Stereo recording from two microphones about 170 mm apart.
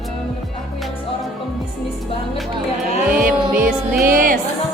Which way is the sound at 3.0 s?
55° right (ahead or behind).